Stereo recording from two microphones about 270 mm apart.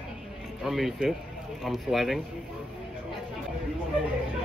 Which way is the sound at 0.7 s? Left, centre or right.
Centre.